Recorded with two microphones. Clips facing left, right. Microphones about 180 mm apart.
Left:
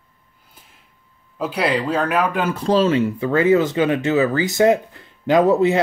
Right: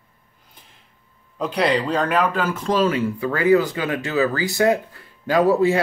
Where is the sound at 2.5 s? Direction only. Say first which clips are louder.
Left 3 dB; 30° left (ahead or behind).